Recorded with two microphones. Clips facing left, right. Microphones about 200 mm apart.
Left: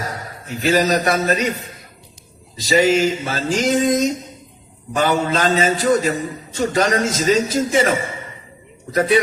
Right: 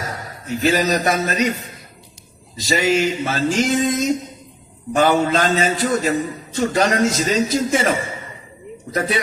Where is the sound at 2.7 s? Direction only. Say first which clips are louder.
Left 3 dB; 40° left (ahead or behind).